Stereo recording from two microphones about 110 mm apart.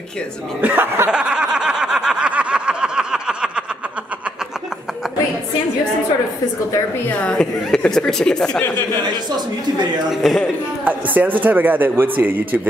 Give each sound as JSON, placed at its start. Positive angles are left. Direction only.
{"t": 0.6, "sound": "speech", "side_deg": -15}
{"t": 1.1, "sound": "snicker", "side_deg": -10}
{"t": 7.1, "sound": "a woman's voice", "side_deg": 10}
{"t": 10.2, "sound": "a man's voice", "side_deg": 0}
{"t": 10.9, "sound": "a man's voice", "side_deg": -15}